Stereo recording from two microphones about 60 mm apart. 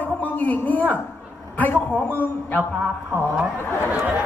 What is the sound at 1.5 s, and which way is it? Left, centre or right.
A man's voice, left.